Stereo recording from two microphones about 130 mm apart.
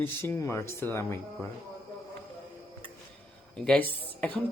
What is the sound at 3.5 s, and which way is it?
Speech, 5° left (ahead or behind).